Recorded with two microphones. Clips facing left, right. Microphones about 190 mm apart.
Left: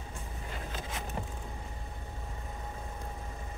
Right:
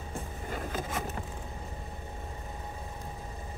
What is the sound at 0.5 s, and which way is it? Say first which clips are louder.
Vehicle: right 6 dB; 50° right (ahead or behind).